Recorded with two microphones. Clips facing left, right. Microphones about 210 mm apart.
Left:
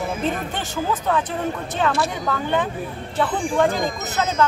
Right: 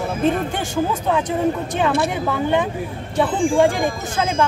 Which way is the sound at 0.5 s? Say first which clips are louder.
Right 3 dB; 10° right (ahead or behind).